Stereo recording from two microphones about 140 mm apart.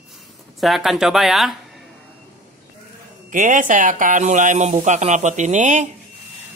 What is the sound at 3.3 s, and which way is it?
Speech, 70° right (ahead or behind).